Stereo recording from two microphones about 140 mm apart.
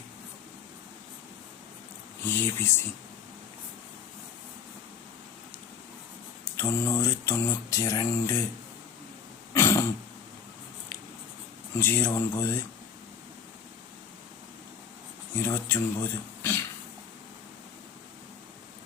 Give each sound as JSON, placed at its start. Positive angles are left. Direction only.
{"t": 2.2, "sound": "speech", "side_deg": 20}
{"t": 6.6, "sound": "mantra", "side_deg": 20}
{"t": 9.6, "sound": "throat clearing", "side_deg": 20}
{"t": 11.8, "sound": "speech", "side_deg": 15}
{"t": 15.4, "sound": "speech", "side_deg": 20}